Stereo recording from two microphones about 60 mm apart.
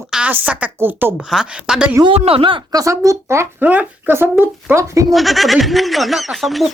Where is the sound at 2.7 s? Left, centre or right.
Right.